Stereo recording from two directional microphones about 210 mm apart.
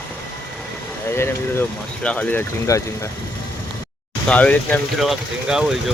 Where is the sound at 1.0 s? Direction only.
10° left (ahead or behind).